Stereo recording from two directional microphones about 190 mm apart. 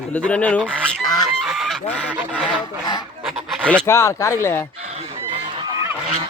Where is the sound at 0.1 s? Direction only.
5° left (ahead or behind).